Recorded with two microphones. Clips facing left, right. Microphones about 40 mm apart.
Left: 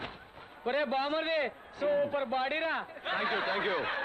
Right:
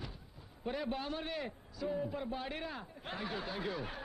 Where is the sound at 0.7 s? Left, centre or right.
Left.